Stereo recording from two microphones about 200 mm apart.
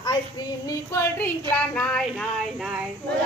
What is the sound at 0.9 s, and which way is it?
Speech, 10° left (ahead or behind).